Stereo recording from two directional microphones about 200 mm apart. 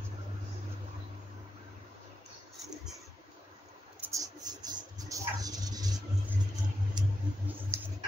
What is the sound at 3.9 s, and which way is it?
Mouse, 15° right (ahead or behind).